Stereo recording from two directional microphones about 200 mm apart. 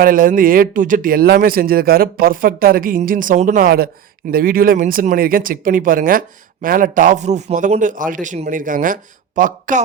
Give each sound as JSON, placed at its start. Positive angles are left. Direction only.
{"t": 0.0, "sound": "speech", "side_deg": -45}